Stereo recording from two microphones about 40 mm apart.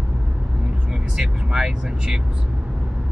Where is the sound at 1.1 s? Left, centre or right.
Centre.